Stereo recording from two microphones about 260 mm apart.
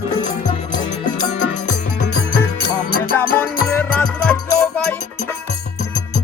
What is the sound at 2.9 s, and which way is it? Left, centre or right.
Music, left.